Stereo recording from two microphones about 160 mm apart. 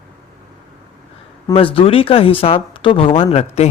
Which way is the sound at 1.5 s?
35° left (ahead or behind).